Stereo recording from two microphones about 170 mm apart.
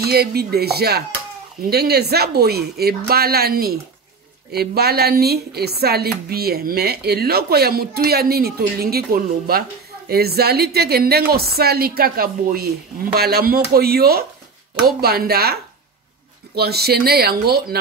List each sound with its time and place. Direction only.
0.0 s speech: 70° right (ahead or behind)